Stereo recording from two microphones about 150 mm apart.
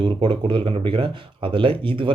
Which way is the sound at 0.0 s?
35° right (ahead or behind).